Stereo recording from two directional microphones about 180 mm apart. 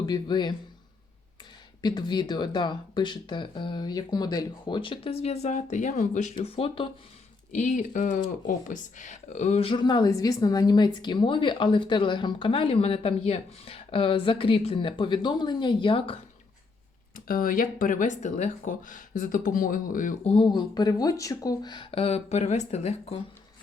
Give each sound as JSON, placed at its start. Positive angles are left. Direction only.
{"t": 0.0, "sound": "speech", "side_deg": 25}
{"t": 1.8, "sound": "speech", "side_deg": 25}
{"t": 6.3, "sound": "speech", "side_deg": 30}
{"t": 7.5, "sound": "speech", "side_deg": 45}
{"t": 17.2, "sound": "speech", "side_deg": 50}
{"t": 20.2, "sound": "speech", "side_deg": 30}